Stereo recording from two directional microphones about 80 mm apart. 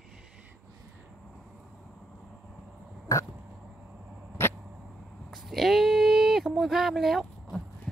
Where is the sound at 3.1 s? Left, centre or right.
Left.